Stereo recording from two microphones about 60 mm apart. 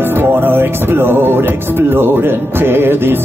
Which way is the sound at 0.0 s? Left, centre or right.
Right.